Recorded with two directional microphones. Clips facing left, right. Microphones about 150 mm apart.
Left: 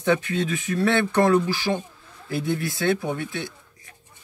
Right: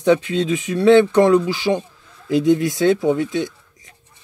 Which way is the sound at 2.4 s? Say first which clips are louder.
Right 8 dB; 15° right (ahead or behind).